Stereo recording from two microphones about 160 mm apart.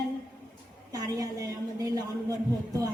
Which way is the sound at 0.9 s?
20° right (ahead or behind).